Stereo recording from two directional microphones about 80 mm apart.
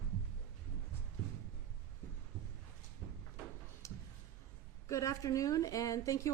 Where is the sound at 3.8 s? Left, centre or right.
Left.